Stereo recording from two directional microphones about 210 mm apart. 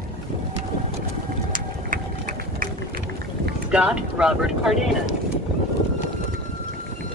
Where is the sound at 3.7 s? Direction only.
5° right (ahead or behind).